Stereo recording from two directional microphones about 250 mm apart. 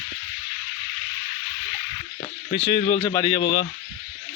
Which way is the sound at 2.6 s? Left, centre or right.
Left.